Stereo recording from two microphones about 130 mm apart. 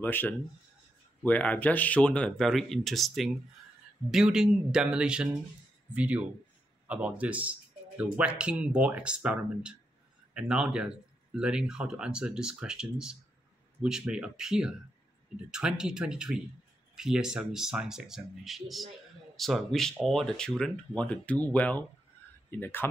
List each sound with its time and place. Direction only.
0.0 s speech: 15° left (ahead or behind)